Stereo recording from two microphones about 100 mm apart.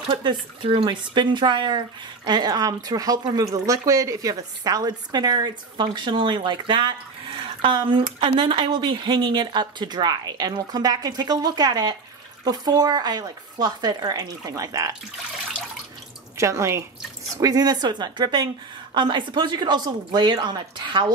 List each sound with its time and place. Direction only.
0.1 s speech: 50° right (ahead or behind)
16.3 s speech: 30° right (ahead or behind)
17.4 s speech: 40° right (ahead or behind)